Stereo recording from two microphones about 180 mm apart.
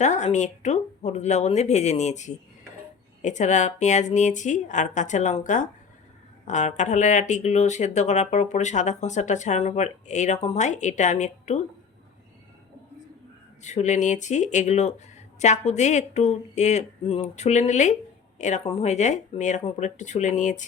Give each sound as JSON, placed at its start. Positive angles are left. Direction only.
{"t": 0.0, "sound": "speech", "side_deg": 40}
{"t": 13.6, "sound": "speech", "side_deg": 40}